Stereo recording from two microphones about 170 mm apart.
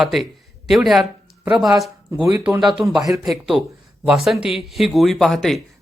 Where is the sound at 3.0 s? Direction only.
20° right (ahead or behind).